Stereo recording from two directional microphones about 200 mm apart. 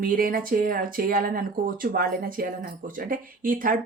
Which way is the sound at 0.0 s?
45° right (ahead or behind).